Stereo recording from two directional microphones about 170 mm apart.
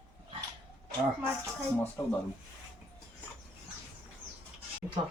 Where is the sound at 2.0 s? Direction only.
20° left (ahead or behind).